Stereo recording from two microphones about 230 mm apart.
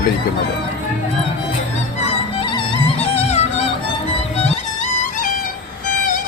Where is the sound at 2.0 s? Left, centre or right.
Left.